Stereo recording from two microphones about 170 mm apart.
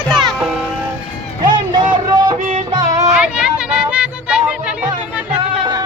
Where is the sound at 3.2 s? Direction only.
5° right (ahead or behind).